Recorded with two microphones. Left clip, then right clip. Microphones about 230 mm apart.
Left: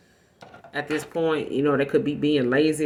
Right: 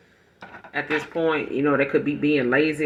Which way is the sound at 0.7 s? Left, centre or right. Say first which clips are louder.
Right 2 dB; left.